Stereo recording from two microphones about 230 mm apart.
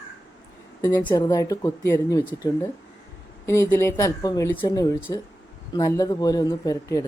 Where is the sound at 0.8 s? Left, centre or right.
Centre.